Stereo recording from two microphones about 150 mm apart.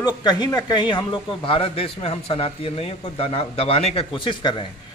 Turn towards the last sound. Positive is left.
turn(degrees=35)  # may be behind; listen again after turning